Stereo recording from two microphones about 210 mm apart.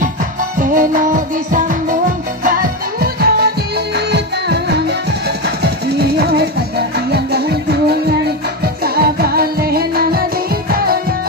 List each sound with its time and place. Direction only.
0.6 s music: 40° right (ahead or behind)
3.0 s music: 45° right (ahead or behind)